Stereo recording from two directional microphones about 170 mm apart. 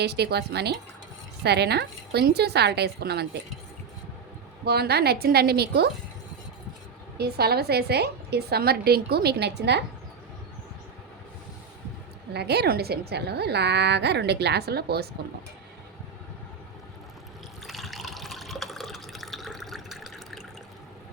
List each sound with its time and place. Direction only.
0.0 s a woman's voice: 75° right (ahead or behind)
4.6 s a woman's voice: 75° right (ahead or behind)
7.2 s a woman's voice: 70° right (ahead or behind)
12.3 s a woman's voice: 75° right (ahead or behind)
17.7 s water: centre (ahead or behind)